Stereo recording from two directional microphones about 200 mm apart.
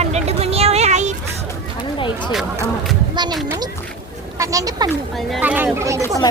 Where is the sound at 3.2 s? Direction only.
20° right (ahead or behind).